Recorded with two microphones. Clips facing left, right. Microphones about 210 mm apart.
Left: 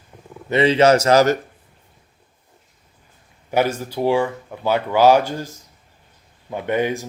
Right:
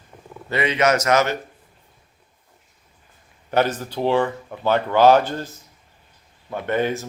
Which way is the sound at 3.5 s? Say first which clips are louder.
Left 1 dB; 10° left (ahead or behind).